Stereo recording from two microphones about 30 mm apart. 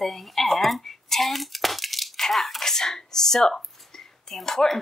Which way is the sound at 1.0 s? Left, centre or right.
Centre.